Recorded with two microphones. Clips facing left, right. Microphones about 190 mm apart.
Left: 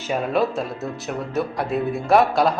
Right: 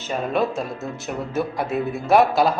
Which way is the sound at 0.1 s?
Centre (ahead or behind).